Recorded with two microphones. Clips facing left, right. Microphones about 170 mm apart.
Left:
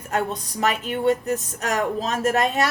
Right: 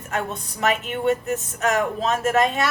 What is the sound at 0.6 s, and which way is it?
Speech, 40° left (ahead or behind).